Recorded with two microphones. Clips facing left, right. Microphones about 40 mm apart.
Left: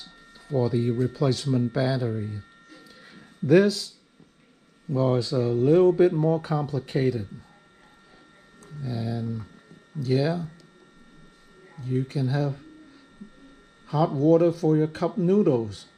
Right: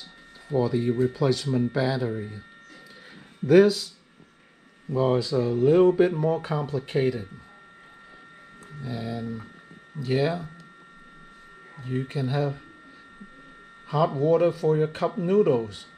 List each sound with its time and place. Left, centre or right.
0.6 s speech: right
3.4 s speech: right
4.9 s speech: right
8.8 s speech: right
11.8 s speech: right
13.8 s speech: right